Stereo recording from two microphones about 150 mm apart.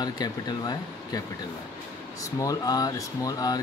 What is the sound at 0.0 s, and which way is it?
Speech, 25° left (ahead or behind).